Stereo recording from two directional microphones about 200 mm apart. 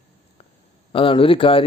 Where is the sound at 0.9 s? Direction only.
25° left (ahead or behind).